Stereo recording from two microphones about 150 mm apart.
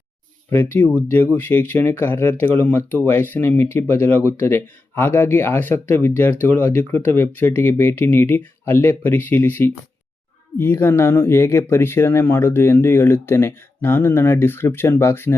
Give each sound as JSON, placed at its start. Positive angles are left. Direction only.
{"t": 0.5, "sound": "speech", "side_deg": 15}